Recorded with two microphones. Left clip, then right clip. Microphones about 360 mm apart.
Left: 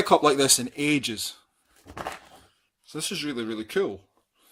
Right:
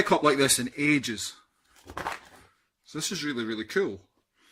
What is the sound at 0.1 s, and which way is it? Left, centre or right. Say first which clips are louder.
Speech: left 6 dB; centre.